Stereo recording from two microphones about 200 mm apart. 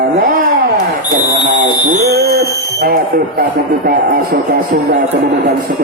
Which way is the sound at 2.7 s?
50° right (ahead or behind).